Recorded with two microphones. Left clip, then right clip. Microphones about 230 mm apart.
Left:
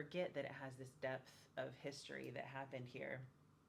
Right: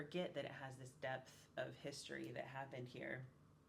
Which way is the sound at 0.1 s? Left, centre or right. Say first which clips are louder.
Left 2 dB; left.